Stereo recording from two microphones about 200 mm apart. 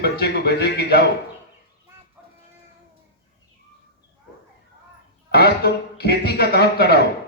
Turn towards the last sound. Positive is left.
turn(degrees=55)  # may be behind; listen again after turning